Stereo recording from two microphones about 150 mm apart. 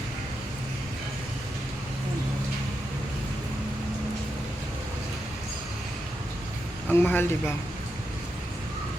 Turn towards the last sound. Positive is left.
turn(degrees=15)  # may be behind; listen again after turning